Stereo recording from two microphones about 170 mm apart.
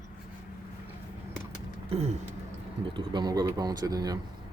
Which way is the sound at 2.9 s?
25° right (ahead or behind).